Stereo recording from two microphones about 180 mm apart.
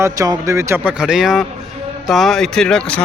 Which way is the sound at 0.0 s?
20° right (ahead or behind).